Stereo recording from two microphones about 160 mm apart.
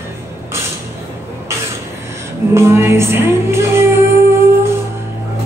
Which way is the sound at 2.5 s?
15° right (ahead or behind).